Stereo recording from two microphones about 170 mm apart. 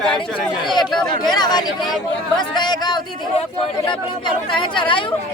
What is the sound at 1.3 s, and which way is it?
Speech, 25° left (ahead or behind).